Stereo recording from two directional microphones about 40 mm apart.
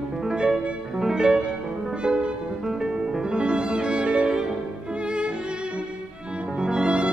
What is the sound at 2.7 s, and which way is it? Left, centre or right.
Music, centre.